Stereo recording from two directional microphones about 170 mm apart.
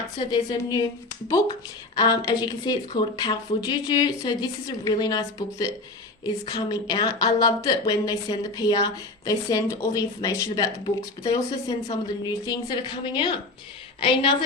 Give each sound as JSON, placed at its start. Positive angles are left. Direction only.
{"t": 0.5, "sound": "speech", "side_deg": 20}
{"t": 2.0, "sound": "a woman's voice", "side_deg": 20}